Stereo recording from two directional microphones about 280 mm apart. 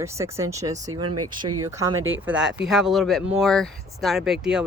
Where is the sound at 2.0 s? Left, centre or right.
Right.